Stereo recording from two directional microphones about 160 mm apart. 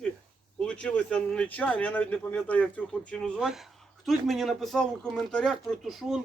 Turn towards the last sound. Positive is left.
turn(degrees=0)  # may be behind; listen again after turning